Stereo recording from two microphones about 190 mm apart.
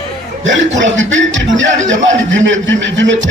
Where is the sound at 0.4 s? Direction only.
80° right.